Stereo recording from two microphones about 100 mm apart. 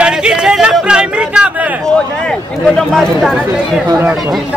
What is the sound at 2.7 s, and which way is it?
Chatter, 5° left (ahead or behind).